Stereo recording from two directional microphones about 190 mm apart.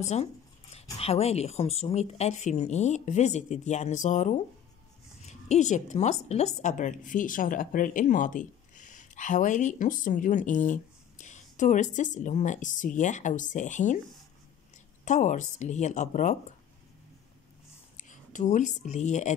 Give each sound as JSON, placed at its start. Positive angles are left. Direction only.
{"t": 0.0, "sound": "dog", "side_deg": 35}
{"t": 0.9, "sound": "a woman's voice", "side_deg": 30}
{"t": 15.0, "sound": "a woman's voice", "side_deg": 40}
{"t": 17.9, "sound": "speech", "side_deg": 40}